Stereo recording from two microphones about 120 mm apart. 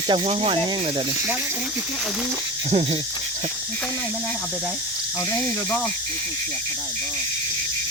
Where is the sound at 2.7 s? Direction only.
60° right (ahead or behind).